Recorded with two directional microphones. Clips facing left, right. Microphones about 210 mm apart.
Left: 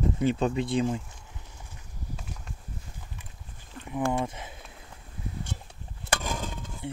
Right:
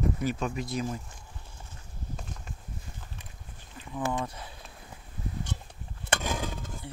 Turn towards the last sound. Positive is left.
turn(degrees=20)  # may be behind; listen again after turning